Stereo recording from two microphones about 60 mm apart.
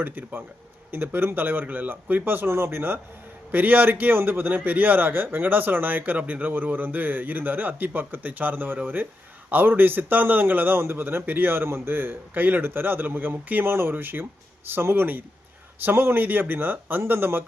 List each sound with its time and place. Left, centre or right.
0.0 s a man's voice: right